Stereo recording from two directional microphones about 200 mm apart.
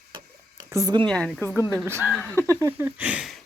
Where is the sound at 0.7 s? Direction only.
15° right (ahead or behind).